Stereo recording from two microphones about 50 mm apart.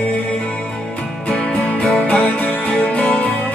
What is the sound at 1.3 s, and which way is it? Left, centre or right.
Music, left.